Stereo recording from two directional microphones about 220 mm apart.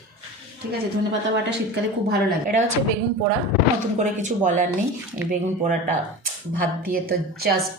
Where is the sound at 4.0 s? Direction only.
35° right (ahead or behind).